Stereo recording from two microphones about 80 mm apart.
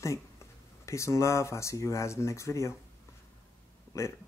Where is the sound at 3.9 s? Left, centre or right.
Left.